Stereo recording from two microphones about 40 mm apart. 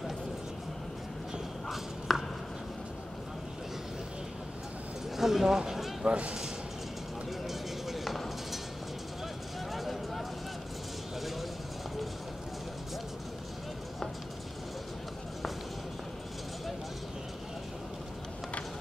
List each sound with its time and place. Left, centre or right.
2.1 s chopping: centre
5.1 s speech: centre
5.6 s a sound: centre
6.0 s speech: right
7.4 s clip-clop: centre
9.7 s a sound: centre